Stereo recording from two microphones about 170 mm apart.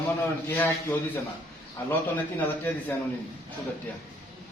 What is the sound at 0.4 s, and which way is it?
A man's voice, 15° left (ahead or behind).